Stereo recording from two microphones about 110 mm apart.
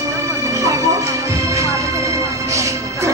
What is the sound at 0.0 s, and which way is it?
Music, 25° right (ahead or behind).